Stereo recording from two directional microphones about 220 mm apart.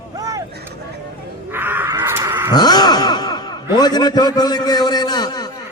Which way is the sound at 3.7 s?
20° left (ahead or behind).